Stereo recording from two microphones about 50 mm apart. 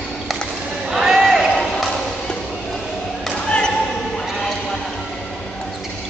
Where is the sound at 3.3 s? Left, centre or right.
Left.